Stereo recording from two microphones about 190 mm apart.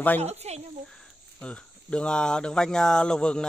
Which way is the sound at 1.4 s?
5° left (ahead or behind).